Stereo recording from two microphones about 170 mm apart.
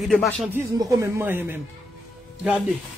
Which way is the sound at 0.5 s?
15° right (ahead or behind).